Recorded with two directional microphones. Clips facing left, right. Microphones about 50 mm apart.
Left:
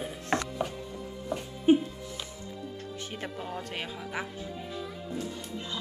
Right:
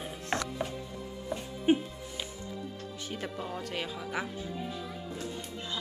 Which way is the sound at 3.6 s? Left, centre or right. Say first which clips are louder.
Right 2 dB; left.